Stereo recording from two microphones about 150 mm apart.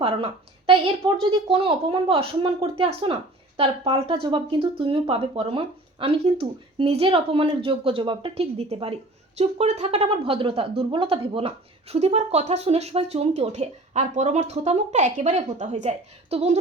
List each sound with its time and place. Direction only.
0.0 s a woman's voice: 35° right (ahead or behind)